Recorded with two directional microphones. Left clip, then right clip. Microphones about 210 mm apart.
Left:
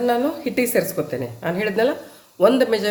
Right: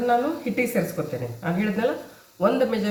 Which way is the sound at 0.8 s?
50° left (ahead or behind).